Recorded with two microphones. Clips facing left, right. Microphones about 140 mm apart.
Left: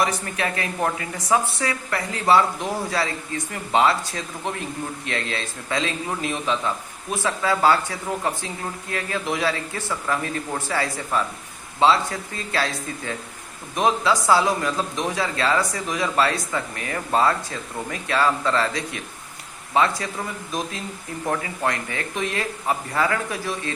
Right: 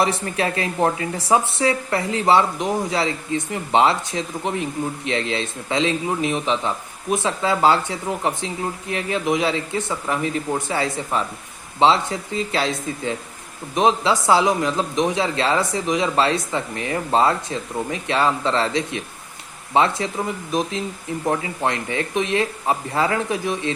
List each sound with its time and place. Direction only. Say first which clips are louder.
0.0 s speech: right 3 dB; 30° right (ahead or behind)